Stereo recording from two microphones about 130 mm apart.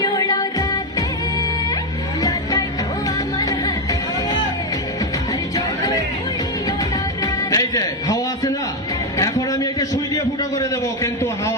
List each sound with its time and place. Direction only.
0.0 s music: 30° left (ahead or behind)
2.2 s music: 30° left (ahead or behind)
5.5 s music: 25° left (ahead or behind)
7.2 s music: 25° left (ahead or behind)
9.1 s a sound: 25° left (ahead or behind)